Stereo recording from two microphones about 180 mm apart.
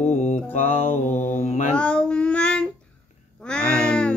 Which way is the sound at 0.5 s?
40° left (ahead or behind).